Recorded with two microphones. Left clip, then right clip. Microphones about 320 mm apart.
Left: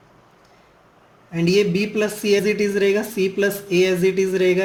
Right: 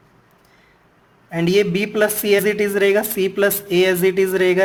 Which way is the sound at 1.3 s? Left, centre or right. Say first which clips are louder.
Right 1 dB; right.